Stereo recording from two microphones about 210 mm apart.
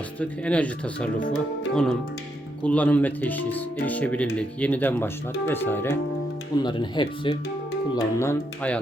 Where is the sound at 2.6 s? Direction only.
5° left (ahead or behind).